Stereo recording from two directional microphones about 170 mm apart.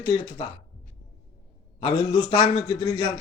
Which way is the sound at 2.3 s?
25° left (ahead or behind).